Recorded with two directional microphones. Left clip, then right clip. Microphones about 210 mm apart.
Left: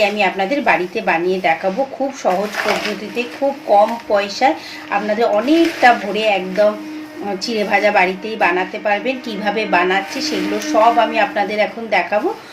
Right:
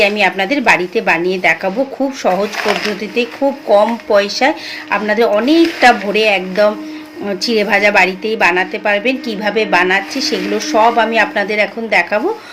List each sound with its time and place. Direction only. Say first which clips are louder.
0.0 s a woman's voice: right 3 dB; 35° right (ahead or behind)